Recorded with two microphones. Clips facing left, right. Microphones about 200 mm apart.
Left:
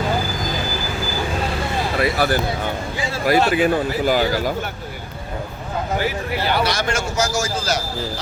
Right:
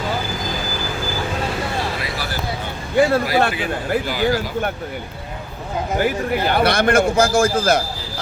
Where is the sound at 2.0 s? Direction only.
55° left (ahead or behind).